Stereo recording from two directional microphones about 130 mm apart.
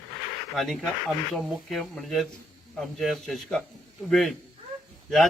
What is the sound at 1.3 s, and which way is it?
A man's voice, centre (ahead or behind).